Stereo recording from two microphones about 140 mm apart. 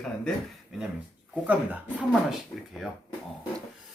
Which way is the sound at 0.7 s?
5° right (ahead or behind).